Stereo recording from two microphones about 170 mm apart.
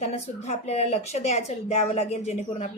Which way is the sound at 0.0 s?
40° left (ahead or behind).